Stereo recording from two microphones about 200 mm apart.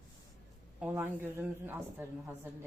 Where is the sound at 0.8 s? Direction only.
10° right (ahead or behind).